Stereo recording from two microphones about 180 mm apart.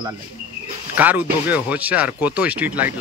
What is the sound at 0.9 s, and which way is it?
Speech, 10° right (ahead or behind).